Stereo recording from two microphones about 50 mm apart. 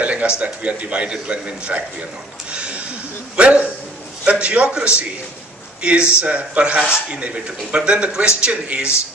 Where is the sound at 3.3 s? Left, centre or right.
Right.